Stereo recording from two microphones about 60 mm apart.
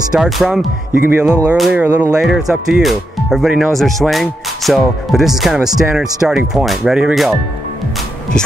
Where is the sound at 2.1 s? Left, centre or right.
Centre.